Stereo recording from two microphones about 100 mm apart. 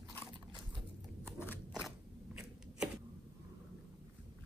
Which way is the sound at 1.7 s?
5° right (ahead or behind).